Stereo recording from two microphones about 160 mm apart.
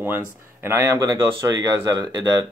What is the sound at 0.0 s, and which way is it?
Speech, 15° right (ahead or behind).